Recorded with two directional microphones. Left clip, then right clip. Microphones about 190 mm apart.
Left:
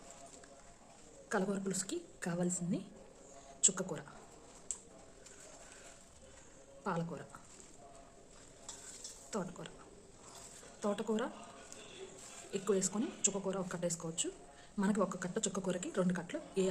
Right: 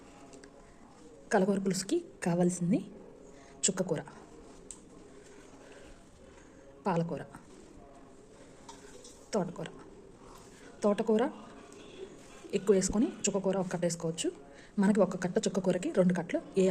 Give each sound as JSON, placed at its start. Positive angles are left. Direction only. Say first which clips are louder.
{"t": 1.3, "sound": "speech", "louder": "right 8 dB", "side_deg": -15}
{"t": 6.8, "sound": "speech", "louder": "right 7 dB", "side_deg": -15}
{"t": 9.3, "sound": "speech", "louder": "right 9 dB", "side_deg": -15}
{"t": 10.8, "sound": "speech", "louder": "right 9 dB", "side_deg": -15}
{"t": 12.5, "sound": "speech", "louder": "right 8 dB", "side_deg": -15}